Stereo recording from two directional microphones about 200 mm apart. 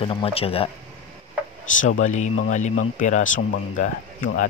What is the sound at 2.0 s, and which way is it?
Speech, 40° left (ahead or behind).